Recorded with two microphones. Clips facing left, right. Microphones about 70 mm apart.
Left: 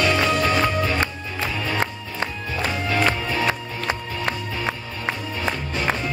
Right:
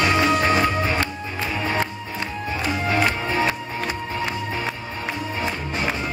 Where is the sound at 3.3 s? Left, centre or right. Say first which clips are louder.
Right 1 dB; right.